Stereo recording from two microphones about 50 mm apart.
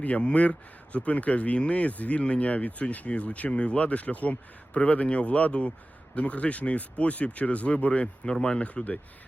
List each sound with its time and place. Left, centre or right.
0.0 s speech: left